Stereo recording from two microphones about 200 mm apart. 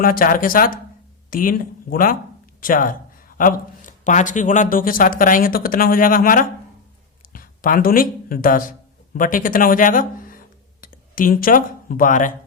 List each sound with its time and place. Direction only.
0.0 s speech: 45° left (ahead or behind)